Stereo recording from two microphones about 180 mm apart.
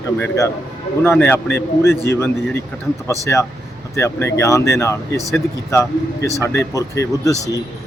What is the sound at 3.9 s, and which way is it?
Speech, 15° left (ahead or behind).